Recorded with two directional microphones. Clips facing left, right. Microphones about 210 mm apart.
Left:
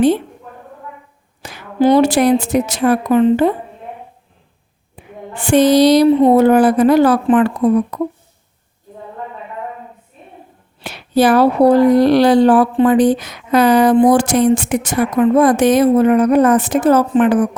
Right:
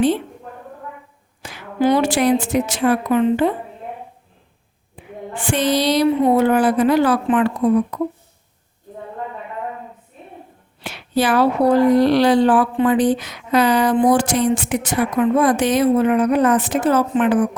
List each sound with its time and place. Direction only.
1.4 s speech: 40° left (ahead or behind)
5.0 s a sound: 40° left (ahead or behind)
5.3 s speech: 40° left (ahead or behind)
10.8 s speech: 40° left (ahead or behind)